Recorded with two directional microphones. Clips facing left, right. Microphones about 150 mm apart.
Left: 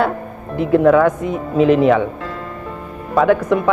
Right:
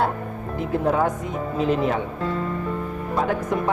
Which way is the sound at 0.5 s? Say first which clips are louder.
Left 10 dB; 70° left (ahead or behind).